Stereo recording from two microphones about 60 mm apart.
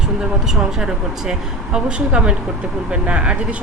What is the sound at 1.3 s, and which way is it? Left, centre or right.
Speech, centre.